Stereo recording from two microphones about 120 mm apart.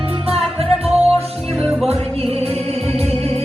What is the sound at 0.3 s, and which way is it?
Music, 55° right (ahead or behind).